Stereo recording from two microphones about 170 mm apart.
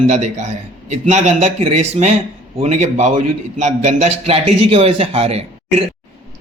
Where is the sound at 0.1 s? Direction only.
40° right (ahead or behind).